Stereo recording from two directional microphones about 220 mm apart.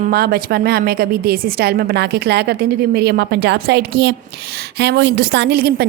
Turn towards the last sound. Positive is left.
turn(degrees=-45)  # may be behind; listen again after turning